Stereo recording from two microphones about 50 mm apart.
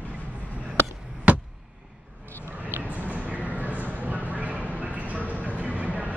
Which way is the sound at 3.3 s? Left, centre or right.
Right.